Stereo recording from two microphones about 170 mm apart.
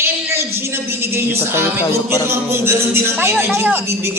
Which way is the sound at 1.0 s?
15° right (ahead or behind).